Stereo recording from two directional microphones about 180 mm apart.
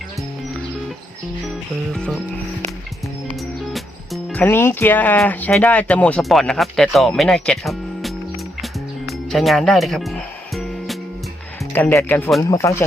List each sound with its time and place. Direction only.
1.9 s speech: centre (ahead or behind)
3.7 s music: centre (ahead or behind)
4.4 s speech: 10° left (ahead or behind)
8.6 s music: centre (ahead or behind)
11.7 s speech: 10° left (ahead or behind)